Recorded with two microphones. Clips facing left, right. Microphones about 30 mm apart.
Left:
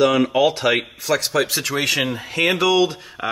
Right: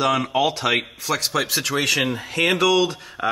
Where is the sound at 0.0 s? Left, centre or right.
Centre.